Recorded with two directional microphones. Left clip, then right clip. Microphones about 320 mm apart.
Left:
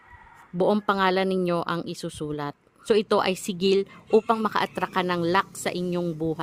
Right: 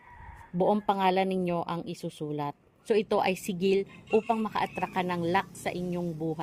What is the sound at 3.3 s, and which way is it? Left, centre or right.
Speech, left.